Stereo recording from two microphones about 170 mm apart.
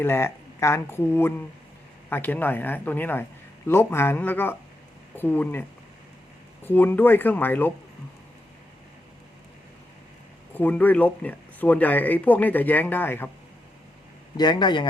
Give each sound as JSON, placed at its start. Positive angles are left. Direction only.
{"t": 0.0, "sound": "speech", "side_deg": 15}
{"t": 6.7, "sound": "speech", "side_deg": 10}
{"t": 10.5, "sound": "speech", "side_deg": 10}
{"t": 14.3, "sound": "a man's voice", "side_deg": 25}